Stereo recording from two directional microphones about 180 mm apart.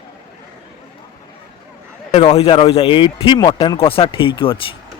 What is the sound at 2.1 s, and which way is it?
Speech, 35° left (ahead or behind).